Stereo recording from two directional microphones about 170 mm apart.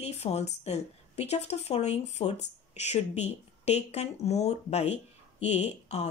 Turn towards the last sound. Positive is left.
turn(degrees=40)  # may be behind; listen again after turning